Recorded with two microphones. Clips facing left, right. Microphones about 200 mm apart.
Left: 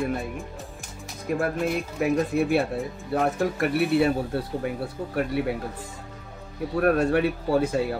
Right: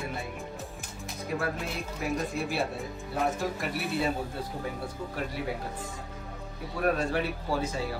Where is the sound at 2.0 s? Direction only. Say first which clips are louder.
Left 8 dB; 60° left (ahead or behind).